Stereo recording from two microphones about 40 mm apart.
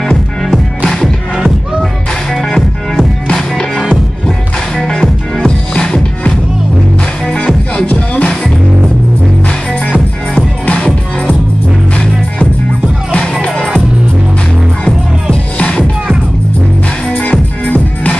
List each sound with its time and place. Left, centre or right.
0.8 s music: centre
3.3 s music: centre
4.8 s music: centre
7.2 s music: left
7.8 s music: left
9.8 s music: left
13.1 s music: left
17.1 s music: left